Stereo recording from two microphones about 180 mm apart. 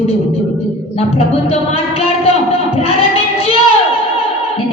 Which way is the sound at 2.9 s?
35° left (ahead or behind).